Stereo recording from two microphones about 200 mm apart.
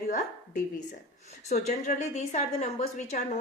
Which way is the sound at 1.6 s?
35° left (ahead or behind).